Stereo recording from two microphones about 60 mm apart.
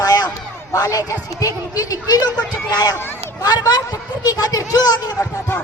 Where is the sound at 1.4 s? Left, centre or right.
Left.